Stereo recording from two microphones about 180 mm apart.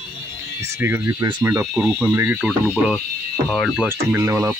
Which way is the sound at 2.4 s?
Centre (ahead or behind).